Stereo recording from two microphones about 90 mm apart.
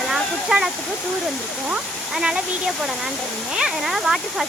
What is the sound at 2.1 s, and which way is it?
Speech, 10° right (ahead or behind).